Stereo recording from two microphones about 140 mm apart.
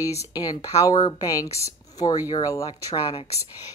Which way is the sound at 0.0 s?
25° left (ahead or behind).